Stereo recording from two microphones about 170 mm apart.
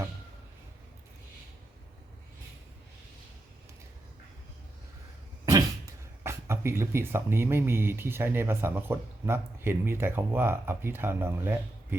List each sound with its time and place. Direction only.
6.2 s speech: 15° right (ahead or behind)